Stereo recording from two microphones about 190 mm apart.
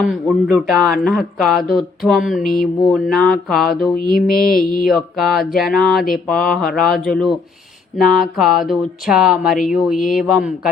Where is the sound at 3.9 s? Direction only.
50° left (ahead or behind).